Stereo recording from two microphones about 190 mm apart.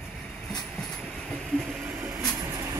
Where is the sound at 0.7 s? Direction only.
5° left (ahead or behind).